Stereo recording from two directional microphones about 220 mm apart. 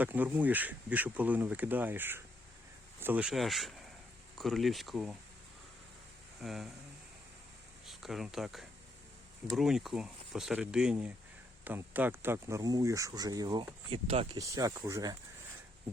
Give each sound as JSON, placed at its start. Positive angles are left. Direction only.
{"t": 0.0, "sound": "speech", "side_deg": -10}
{"t": 6.4, "sound": "speech", "side_deg": 0}
{"t": 7.9, "sound": "speech", "side_deg": 0}
{"t": 14.3, "sound": "speech", "side_deg": -15}